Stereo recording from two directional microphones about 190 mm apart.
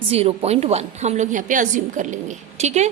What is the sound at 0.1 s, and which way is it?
A woman's voice, 30° right (ahead or behind).